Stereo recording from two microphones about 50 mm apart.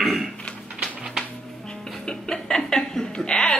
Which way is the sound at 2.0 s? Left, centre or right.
Centre.